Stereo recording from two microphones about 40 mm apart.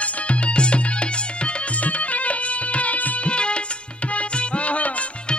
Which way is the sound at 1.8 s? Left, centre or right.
Left.